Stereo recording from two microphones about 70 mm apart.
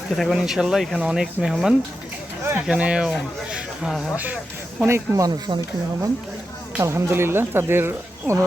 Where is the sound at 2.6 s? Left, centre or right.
Centre.